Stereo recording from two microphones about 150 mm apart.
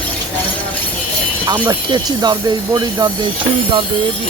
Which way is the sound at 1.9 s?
30° right (ahead or behind).